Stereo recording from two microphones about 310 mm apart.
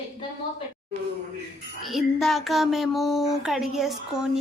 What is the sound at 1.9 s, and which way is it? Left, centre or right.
A woman's voice, centre.